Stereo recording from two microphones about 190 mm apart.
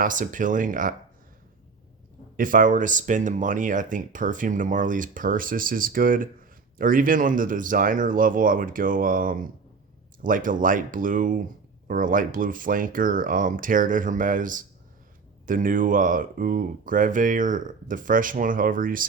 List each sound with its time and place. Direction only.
0.0 s speech: 45° right (ahead or behind)
2.3 s speech: 45° right (ahead or behind)